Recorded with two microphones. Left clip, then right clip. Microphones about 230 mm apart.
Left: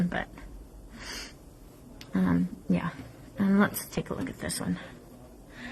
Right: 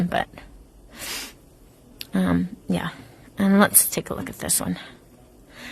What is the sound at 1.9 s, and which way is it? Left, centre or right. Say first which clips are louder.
Speech: right 5 dB; right.